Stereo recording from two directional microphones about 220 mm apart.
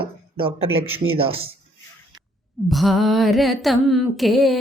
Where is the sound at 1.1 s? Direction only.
25° right (ahead or behind).